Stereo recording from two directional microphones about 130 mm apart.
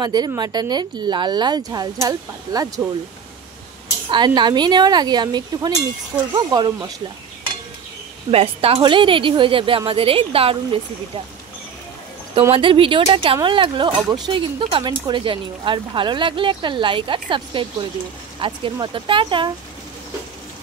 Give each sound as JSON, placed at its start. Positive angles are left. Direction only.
{"t": 0.0, "sound": "speech", "side_deg": -30}
{"t": 4.1, "sound": "speech", "side_deg": -35}
{"t": 8.3, "sound": "speech", "side_deg": -50}
{"t": 12.5, "sound": "speech", "side_deg": -40}